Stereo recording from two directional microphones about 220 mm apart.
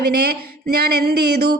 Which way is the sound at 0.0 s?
45° right (ahead or behind).